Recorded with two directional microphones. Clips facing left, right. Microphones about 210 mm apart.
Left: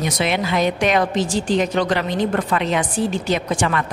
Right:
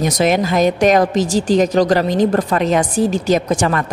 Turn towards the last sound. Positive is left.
turn(degrees=-40)  # may be behind; listen again after turning